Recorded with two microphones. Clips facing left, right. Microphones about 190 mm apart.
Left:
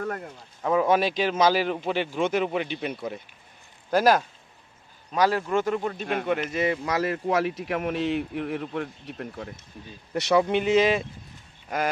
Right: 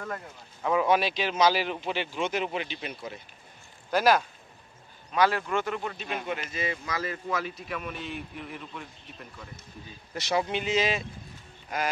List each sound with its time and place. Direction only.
0.7 s a man's voice: 40° left (ahead or behind)
3.9 s a man's voice: 40° left (ahead or behind)
5.9 s speech: 55° left (ahead or behind)